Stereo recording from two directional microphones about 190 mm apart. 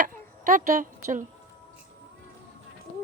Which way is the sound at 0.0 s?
45° right (ahead or behind).